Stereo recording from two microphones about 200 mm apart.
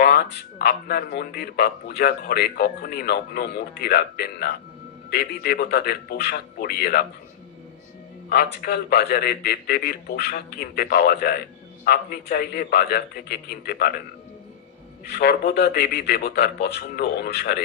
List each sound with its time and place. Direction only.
0.0 s speech: 55° left (ahead or behind)
8.3 s speech: 55° left (ahead or behind)
15.0 s speech: 55° left (ahead or behind)